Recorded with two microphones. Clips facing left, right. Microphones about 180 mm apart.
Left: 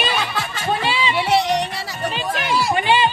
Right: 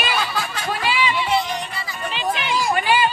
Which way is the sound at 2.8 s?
25° left (ahead or behind).